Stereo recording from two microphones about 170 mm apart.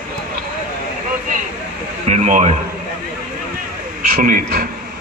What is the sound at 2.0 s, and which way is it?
Speech, 45° right (ahead or behind).